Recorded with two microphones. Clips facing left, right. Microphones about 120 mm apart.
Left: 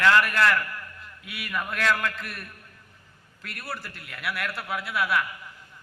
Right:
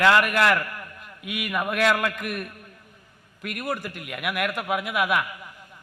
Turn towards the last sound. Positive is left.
turn(degrees=-15)  # may be behind; listen again after turning